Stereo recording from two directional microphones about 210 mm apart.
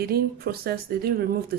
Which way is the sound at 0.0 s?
45° right (ahead or behind).